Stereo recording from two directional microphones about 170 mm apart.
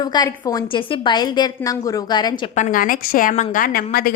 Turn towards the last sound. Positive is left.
turn(degrees=55)  # may be behind; listen again after turning